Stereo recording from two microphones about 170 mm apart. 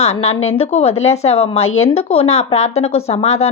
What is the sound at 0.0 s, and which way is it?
A woman's voice, 40° left (ahead or behind).